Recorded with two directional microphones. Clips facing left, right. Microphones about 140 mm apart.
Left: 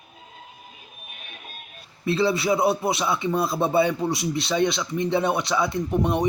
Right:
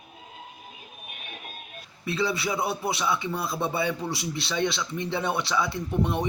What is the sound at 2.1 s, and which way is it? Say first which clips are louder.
A man's voice: left 6 dB; 25° left (ahead or behind).